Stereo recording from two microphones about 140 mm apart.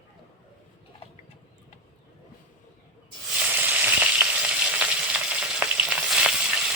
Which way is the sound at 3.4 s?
10° right (ahead or behind).